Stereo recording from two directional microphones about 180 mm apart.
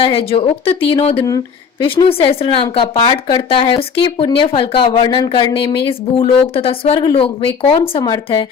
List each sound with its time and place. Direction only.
0.0 s speech: 30° left (ahead or behind)